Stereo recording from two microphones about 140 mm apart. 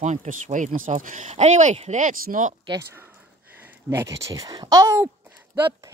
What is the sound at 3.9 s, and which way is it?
Speech, 20° right (ahead or behind).